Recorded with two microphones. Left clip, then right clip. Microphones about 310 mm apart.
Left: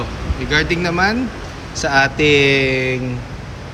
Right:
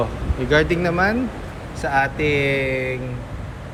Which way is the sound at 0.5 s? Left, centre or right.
Centre.